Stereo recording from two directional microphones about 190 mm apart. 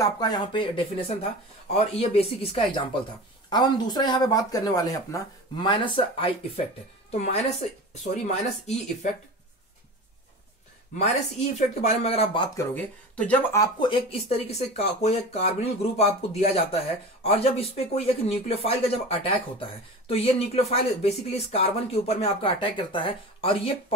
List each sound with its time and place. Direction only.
0.0 s speech: 20° left (ahead or behind); by 8.4 s 35° left (ahead or behind)
11.8 s speech: 30° left (ahead or behind)
12.5 s speech: 10° left (ahead or behind)
13.6 s speech: 25° left (ahead or behind)